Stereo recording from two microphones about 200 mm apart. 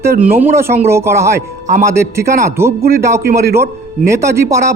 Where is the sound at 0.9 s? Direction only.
15° right (ahead or behind).